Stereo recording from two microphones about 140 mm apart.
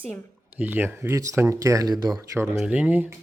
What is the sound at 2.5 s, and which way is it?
Speech, 5° right (ahead or behind).